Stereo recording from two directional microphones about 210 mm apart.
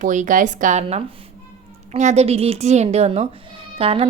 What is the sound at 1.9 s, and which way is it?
A woman's voice, 35° right (ahead or behind).